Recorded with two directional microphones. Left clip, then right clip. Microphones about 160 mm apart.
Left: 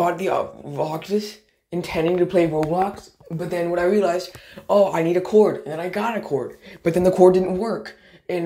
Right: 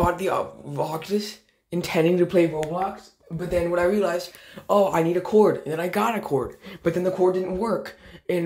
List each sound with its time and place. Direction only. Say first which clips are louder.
0.0 s speech: left 2 dB; centre (ahead or behind)
1.8 s speech: even; 25° right (ahead or behind)
3.3 s speech: even; centre (ahead or behind)
4.7 s speech: left 3 dB; 10° right (ahead or behind)
5.4 s speech: left 1 dB; 30° right (ahead or behind)
6.0 s speech: even; 15° right (ahead or behind)
7.0 s speech: left 8 dB; 20° left (ahead or behind)
7.5 s speech: even; 15° right (ahead or behind)